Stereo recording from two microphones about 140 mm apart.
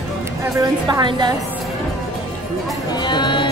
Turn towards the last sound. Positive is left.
turn(degrees=35)  # may be behind; listen again after turning